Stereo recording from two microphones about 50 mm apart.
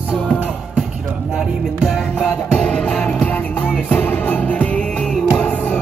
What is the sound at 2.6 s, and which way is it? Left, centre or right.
Music, centre.